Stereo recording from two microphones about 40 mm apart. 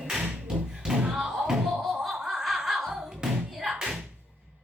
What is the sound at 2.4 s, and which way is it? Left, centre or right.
Music, centre.